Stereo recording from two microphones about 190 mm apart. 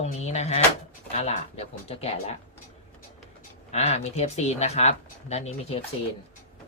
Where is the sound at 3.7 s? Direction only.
35° left (ahead or behind).